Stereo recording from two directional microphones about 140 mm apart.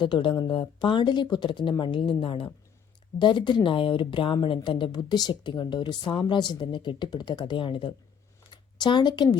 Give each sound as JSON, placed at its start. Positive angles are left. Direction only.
{"t": 0.0, "sound": "speech", "side_deg": 35}